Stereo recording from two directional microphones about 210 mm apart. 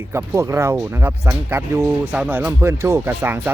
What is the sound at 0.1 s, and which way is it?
Speech, 15° right (ahead or behind).